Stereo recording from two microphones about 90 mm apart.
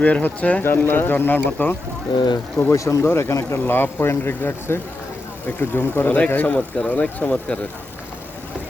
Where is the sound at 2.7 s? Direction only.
35° left (ahead or behind); by 7.6 s 15° left (ahead or behind).